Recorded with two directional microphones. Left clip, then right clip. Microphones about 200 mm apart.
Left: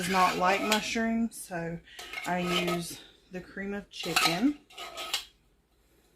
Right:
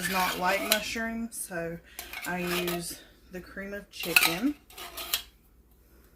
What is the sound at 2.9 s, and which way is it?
Speech, 30° left (ahead or behind).